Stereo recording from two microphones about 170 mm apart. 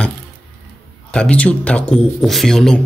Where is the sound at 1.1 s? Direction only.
5° left (ahead or behind).